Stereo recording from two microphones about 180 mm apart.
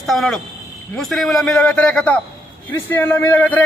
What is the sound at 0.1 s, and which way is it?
A man's voice, centre (ahead or behind).